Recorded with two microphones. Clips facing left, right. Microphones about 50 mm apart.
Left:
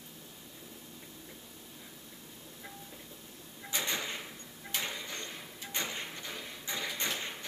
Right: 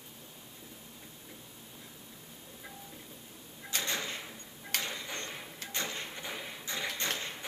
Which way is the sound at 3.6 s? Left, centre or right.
Centre.